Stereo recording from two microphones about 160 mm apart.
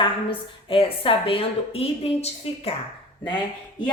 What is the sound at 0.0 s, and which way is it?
A woman's voice, 35° left (ahead or behind).